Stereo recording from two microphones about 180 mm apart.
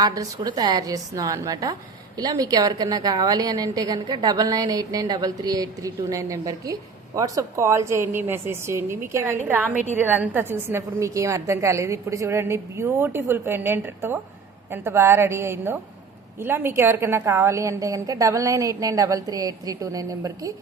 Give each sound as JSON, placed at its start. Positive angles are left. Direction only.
{"t": 0.0, "sound": "a woman's voice", "side_deg": -20}